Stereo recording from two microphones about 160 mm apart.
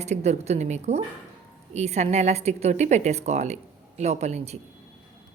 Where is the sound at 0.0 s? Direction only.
45° right (ahead or behind).